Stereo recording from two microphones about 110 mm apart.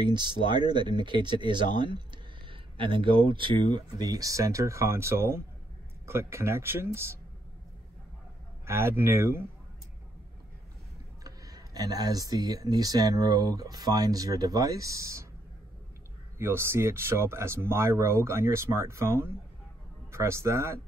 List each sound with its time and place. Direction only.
0.0 s speech: 45° right (ahead or behind); by 7.2 s 25° right (ahead or behind)
8.6 s speech: 25° right (ahead or behind)
11.2 s speech: 35° right (ahead or behind)
16.3 s a man's voice: 20° right (ahead or behind)